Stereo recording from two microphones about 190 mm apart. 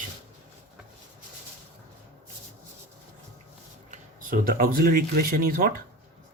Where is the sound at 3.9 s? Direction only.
50° right (ahead or behind).